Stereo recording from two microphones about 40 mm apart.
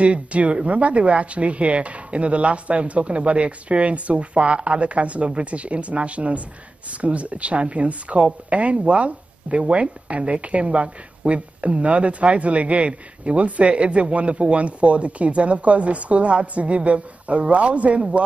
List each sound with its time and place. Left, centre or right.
0.0 s speech: right